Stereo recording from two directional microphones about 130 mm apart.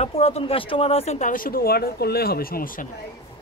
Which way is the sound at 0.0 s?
50° left (ahead or behind).